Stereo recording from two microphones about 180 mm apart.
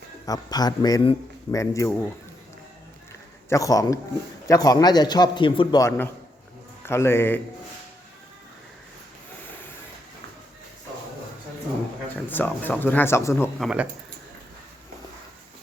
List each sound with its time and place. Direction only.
0.3 s speech: 20° left (ahead or behind)
3.5 s speech: 20° left (ahead or behind)
6.8 s speech: 15° left (ahead or behind)
12.1 s speech: 10° left (ahead or behind)
13.6 s speech: 5° right (ahead or behind)